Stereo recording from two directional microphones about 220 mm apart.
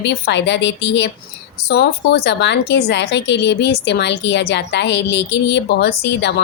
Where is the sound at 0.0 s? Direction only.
50° left (ahead or behind).